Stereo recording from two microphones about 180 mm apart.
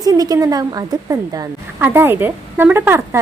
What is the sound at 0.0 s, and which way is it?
A woman's voice, 20° right (ahead or behind).